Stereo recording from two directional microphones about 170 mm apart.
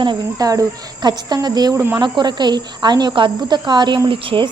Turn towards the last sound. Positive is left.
turn(degrees=-30)  # may be behind; listen again after turning